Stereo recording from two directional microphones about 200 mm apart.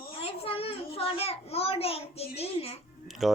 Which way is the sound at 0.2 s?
30° left (ahead or behind).